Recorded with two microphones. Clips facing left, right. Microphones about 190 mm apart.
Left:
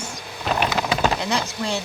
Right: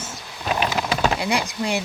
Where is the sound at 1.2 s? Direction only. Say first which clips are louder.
Right 1 dB; 15° right (ahead or behind).